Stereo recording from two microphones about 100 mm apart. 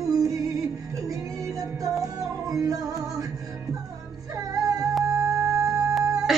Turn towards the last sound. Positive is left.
turn(degrees=-35)  # may be behind; listen again after turning